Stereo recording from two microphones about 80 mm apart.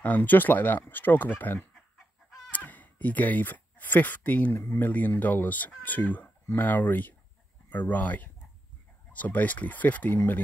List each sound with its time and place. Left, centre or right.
0.0 s speech: left
2.5 s a sound: centre
4.6 s speech: left
4.8 s speech: left